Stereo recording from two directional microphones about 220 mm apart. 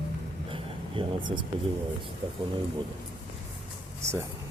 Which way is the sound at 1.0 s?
20° right (ahead or behind).